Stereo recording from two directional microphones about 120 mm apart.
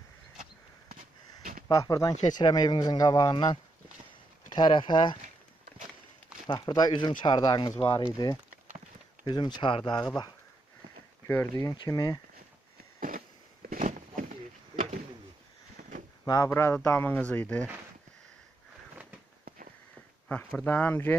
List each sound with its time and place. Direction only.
1.7 s speech: 30° left (ahead or behind)
4.6 s speech: 40° left (ahead or behind)
6.4 s speech: 35° left (ahead or behind)
11.2 s speech: 20° left (ahead or behind)
13.7 s a sound: 90° right
16.3 s speech: 25° left (ahead or behind)
20.2 s speech: 15° left (ahead or behind)